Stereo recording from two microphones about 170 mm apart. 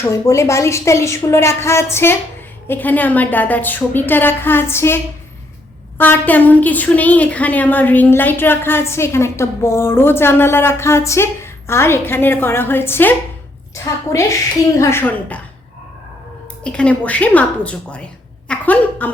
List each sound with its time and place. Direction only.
0.0 s a woman's voice: 15° left (ahead or behind)
6.0 s a woman's voice: 10° left (ahead or behind)
16.6 s a woman's voice: 5° left (ahead or behind)
18.4 s a sound: 10° left (ahead or behind)